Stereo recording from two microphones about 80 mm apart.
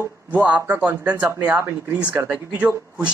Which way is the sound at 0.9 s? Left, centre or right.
Right.